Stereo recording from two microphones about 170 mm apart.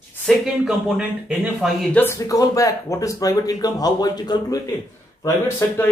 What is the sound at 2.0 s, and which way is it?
Speech, 15° left (ahead or behind).